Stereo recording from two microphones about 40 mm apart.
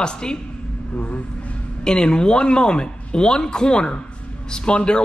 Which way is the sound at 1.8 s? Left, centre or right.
Left.